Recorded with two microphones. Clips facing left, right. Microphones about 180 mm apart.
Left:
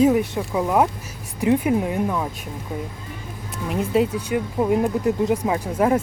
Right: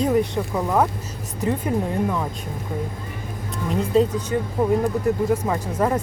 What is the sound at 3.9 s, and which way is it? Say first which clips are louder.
Speech: right 1 dB; 10° left (ahead or behind).